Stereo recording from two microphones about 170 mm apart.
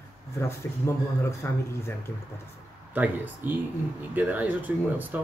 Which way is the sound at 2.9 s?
10° right (ahead or behind).